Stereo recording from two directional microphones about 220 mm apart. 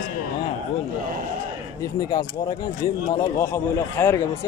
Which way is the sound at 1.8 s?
15° left (ahead or behind).